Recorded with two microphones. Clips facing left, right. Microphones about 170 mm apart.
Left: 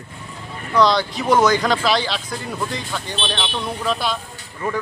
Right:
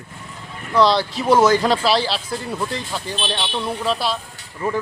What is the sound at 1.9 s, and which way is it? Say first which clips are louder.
Speech: right 2 dB; 30° right (ahead or behind).